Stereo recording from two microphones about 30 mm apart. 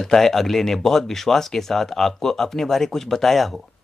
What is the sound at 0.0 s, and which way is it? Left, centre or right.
Speech, centre.